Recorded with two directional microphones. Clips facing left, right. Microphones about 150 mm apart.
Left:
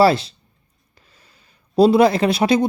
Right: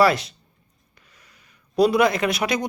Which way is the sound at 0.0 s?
30° left (ahead or behind).